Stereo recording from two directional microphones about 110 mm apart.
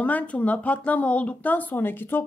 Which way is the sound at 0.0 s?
15° left (ahead or behind).